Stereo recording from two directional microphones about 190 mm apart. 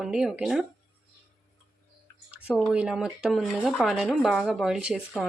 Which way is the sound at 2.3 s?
5° right (ahead or behind).